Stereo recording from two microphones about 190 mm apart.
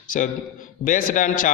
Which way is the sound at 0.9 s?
45° left (ahead or behind).